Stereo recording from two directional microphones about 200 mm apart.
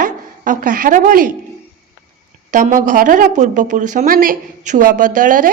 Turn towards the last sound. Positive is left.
turn(degrees=-40)  # may be behind; listen again after turning